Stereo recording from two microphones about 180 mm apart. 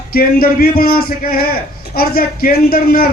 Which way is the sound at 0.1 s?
55° left (ahead or behind).